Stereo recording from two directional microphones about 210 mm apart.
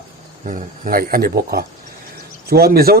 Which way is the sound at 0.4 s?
40° right (ahead or behind).